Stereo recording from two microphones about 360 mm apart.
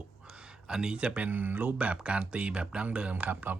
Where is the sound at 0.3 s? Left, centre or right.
Centre.